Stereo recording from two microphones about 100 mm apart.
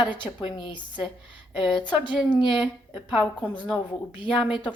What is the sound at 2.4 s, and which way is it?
A woman's voice, 55° left (ahead or behind).